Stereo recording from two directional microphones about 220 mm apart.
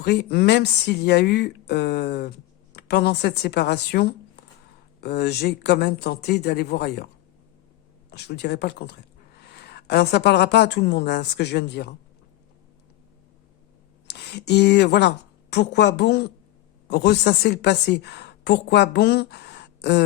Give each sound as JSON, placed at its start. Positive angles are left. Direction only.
{"t": 0.0, "sound": "a woman's voice", "side_deg": 50}
{"t": 8.1, "sound": "a woman's voice", "side_deg": 50}
{"t": 14.1, "sound": "a woman's voice", "side_deg": 50}